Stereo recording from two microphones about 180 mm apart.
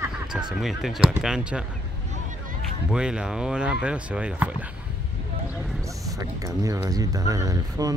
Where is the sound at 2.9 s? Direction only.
5° right (ahead or behind).